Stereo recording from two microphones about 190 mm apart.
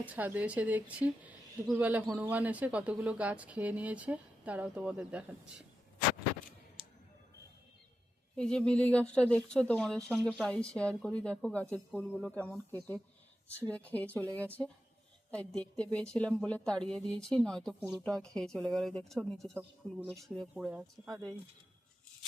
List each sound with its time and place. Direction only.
0.0 s a woman's voice: 10° right (ahead or behind)
8.4 s a woman's voice: 5° left (ahead or behind)
21.1 s speech: 20° right (ahead or behind)